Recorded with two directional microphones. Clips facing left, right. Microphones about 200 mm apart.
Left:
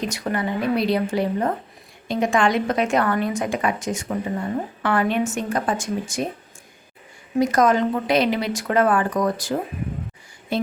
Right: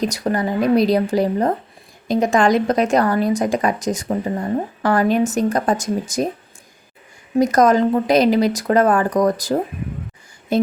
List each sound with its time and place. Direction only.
0.0 s a woman's voice: 40° right (ahead or behind)
7.3 s a woman's voice: 40° right (ahead or behind)